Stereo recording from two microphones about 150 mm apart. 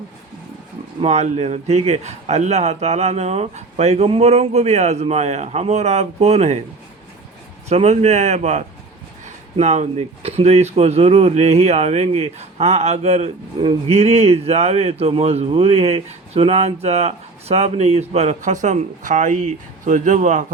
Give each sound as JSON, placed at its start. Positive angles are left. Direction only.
{"t": 1.0, "sound": "speech", "side_deg": -45}
{"t": 7.7, "sound": "speech", "side_deg": -45}